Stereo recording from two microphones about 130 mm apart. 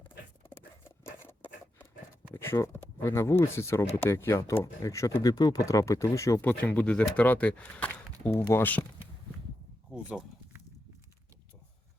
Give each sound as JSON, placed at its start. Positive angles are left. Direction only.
{"t": 0.5, "sound": "a sound", "side_deg": 20}
{"t": 2.3, "sound": "speech", "side_deg": 20}
{"t": 6.4, "sound": "speech", "side_deg": 10}
{"t": 9.9, "sound": "speech", "side_deg": -5}